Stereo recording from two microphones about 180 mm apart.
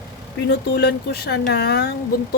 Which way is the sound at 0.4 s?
70° left (ahead or behind).